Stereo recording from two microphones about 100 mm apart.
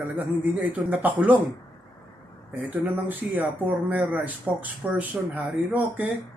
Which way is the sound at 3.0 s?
20° right (ahead or behind).